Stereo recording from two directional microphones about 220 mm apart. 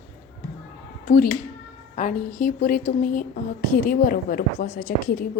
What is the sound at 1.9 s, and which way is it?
A woman's voice, 35° left (ahead or behind).